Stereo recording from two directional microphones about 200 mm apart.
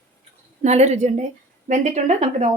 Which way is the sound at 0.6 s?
35° right (ahead or behind).